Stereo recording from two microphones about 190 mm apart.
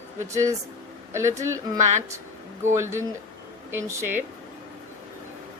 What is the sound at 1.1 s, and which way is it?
Speech, 15° right (ahead or behind).